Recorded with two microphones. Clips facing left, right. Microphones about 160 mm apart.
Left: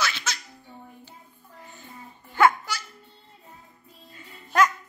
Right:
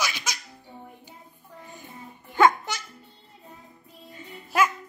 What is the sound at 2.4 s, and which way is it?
Music, 20° right (ahead or behind).